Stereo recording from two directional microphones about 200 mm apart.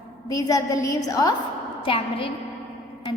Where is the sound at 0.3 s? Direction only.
15° left (ahead or behind).